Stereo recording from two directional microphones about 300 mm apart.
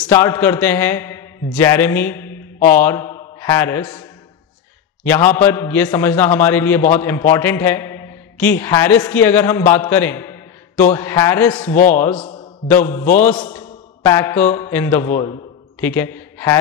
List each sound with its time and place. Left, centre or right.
0.0 s a man's voice: centre
5.0 s a man's voice: centre
12.2 s a sound: centre
12.6 s a man's voice: centre